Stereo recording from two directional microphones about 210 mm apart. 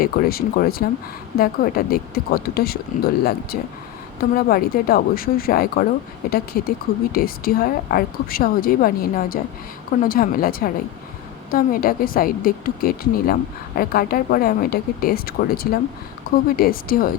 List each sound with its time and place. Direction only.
0.0 s a woman's voice: 45° left (ahead or behind)